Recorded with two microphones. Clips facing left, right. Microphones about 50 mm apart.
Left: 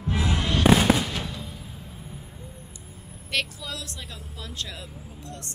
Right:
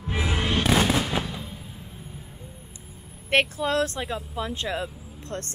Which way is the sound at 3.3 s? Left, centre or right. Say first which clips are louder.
Right 8 dB; right.